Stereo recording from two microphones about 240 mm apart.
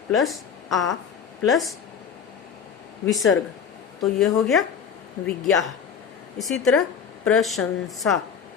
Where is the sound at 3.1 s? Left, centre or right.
Centre.